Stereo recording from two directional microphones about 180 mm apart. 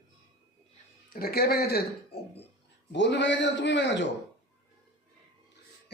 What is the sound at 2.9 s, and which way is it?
A man's voice, 75° left (ahead or behind).